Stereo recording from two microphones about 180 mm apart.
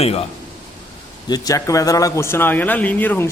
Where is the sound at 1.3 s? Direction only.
20° left (ahead or behind).